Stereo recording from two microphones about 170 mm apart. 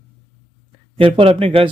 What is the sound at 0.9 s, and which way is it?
Speech, 30° right (ahead or behind).